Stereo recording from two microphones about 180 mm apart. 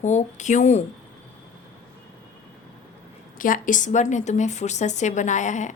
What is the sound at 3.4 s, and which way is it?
A woman's voice, 45° left (ahead or behind).